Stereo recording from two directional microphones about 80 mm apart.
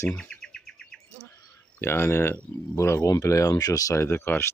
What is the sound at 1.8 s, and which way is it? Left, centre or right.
Speech, left.